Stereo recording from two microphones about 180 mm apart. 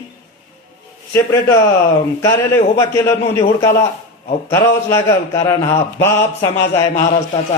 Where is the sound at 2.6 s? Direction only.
15° left (ahead or behind).